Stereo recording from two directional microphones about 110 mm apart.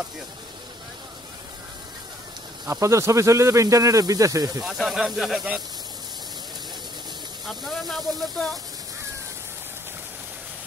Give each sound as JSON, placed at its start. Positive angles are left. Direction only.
{"t": 2.6, "sound": "speech", "side_deg": -30}
{"t": 4.6, "sound": "speech", "side_deg": 0}
{"t": 7.4, "sound": "speech", "side_deg": 0}